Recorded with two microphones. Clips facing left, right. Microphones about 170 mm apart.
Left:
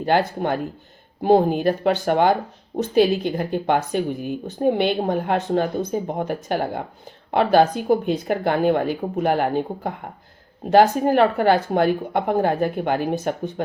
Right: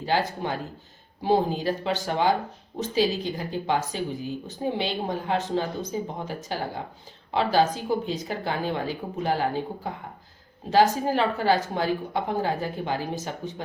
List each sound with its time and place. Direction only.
0.0 s a woman's voice: 55° left (ahead or behind)